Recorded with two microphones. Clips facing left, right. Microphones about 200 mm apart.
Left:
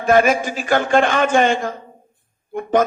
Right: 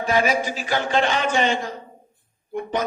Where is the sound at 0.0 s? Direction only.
50° left (ahead or behind).